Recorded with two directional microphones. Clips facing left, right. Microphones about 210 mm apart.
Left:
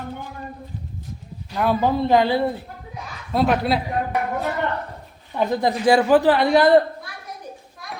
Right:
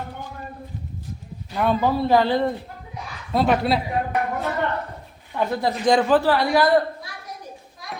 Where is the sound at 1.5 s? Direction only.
Centre (ahead or behind).